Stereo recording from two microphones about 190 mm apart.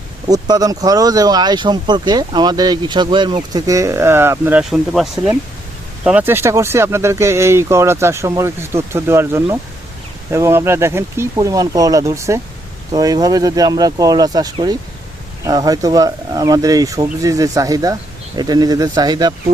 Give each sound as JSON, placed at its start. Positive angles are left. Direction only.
{"t": 0.3, "sound": "speech", "side_deg": -20}